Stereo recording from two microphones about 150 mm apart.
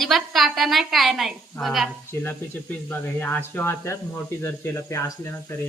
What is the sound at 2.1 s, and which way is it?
Speech, 15° left (ahead or behind).